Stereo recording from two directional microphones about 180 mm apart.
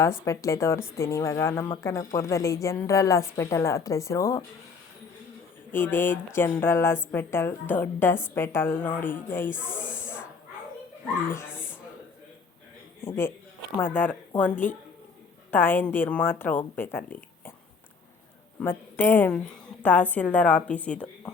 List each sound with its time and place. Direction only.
0.0 s a woman's voice: 15° left (ahead or behind)
5.7 s a woman's voice: 10° left (ahead or behind)
9.6 s speech: 5° right (ahead or behind)
10.0 s snake: 15° left (ahead or behind)
11.4 s a sound: 5° right (ahead or behind)
13.0 s a man's voice: 15° left (ahead or behind)
18.6 s a woman's voice: 10° left (ahead or behind)